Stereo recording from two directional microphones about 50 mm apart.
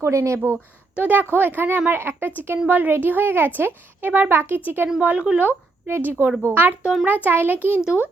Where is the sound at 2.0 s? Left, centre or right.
Right.